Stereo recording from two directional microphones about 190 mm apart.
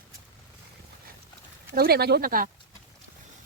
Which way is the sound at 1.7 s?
55° right (ahead or behind).